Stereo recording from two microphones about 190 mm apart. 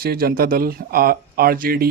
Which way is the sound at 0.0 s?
50° right (ahead or behind).